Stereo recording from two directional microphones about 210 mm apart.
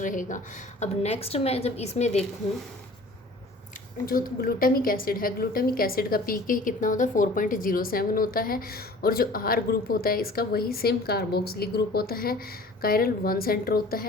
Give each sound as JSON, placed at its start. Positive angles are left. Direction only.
{"t": 0.0, "sound": "a woman's voice", "side_deg": 40}
{"t": 4.0, "sound": "a woman's voice", "side_deg": 45}